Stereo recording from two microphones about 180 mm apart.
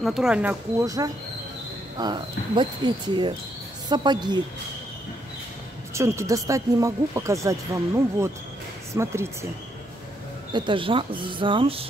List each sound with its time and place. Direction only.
0.0 s speech: centre (ahead or behind)
0.8 s speech: 20° right (ahead or behind)
5.9 s speech: 15° right (ahead or behind)
10.5 s speech: 25° right (ahead or behind)